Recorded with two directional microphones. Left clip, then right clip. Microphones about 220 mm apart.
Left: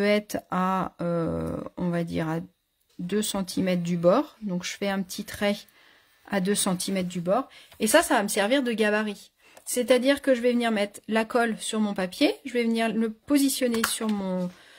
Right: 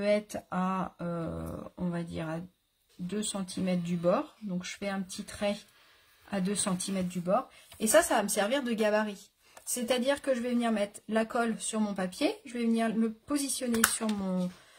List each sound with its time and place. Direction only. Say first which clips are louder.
0.0 s speech: left 5 dB; 45° left (ahead or behind)